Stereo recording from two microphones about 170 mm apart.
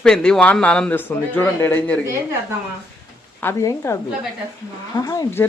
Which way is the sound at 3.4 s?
15° left (ahead or behind).